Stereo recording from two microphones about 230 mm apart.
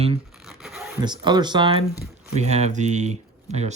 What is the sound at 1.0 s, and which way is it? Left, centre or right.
Speech, centre.